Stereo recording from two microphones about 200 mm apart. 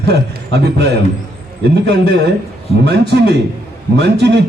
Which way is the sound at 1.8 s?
55° right (ahead or behind).